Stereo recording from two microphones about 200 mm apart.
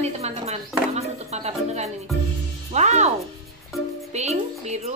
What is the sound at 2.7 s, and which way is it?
Speech, 35° right (ahead or behind).